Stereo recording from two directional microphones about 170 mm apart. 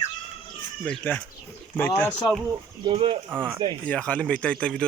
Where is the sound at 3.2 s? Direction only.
10° right (ahead or behind).